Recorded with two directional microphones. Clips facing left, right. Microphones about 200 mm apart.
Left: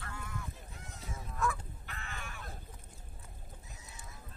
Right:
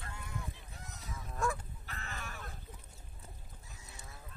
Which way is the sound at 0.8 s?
30° left (ahead or behind).